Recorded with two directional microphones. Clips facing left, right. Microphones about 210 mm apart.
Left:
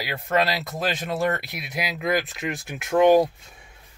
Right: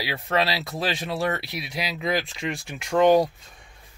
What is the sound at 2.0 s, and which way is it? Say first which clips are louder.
Speech: left 2 dB; 5° left (ahead or behind).